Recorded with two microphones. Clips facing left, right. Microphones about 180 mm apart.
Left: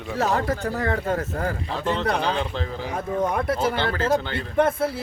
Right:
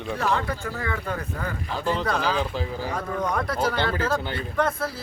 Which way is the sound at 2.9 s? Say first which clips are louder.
Left 4 dB; 25° left (ahead or behind).